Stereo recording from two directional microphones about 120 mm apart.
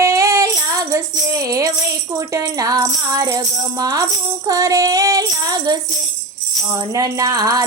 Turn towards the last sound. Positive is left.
turn(degrees=-30)  # may be behind; listen again after turning